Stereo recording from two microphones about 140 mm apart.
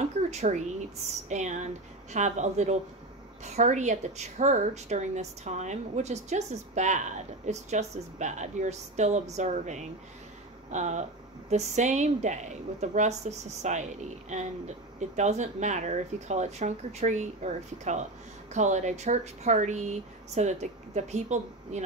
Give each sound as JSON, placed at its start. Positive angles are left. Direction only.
{"t": 0.3, "sound": "speech", "side_deg": -55}